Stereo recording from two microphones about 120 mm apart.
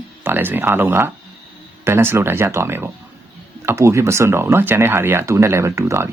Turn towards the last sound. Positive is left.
turn(degrees=-25)  # may be behind; listen again after turning